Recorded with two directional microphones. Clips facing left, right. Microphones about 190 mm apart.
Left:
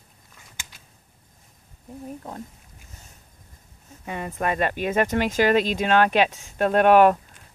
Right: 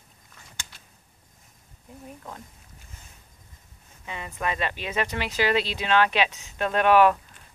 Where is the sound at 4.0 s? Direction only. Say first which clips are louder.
Left 6 dB; 50° left (ahead or behind).